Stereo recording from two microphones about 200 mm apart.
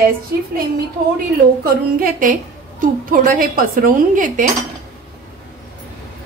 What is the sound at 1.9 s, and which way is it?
A woman's voice, 45° right (ahead or behind).